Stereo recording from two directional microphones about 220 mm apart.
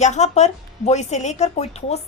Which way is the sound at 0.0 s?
30° left (ahead or behind).